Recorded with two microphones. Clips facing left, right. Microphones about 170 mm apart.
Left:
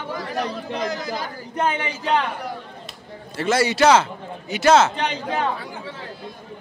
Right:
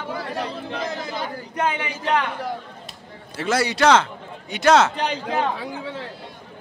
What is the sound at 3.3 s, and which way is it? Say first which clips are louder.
A man's voice: left 2 dB; centre (ahead or behind).